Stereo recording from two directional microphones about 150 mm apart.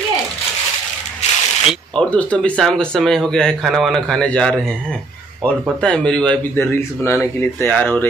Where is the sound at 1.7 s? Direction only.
5° left (ahead or behind).